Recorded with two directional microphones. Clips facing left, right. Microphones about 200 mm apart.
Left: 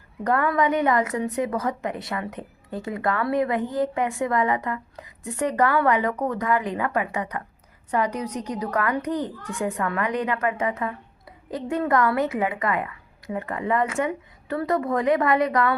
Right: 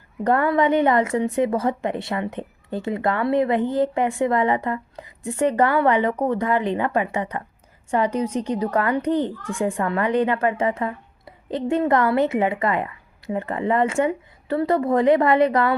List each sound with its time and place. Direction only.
0.3 s a child's voice: 30° right (ahead or behind)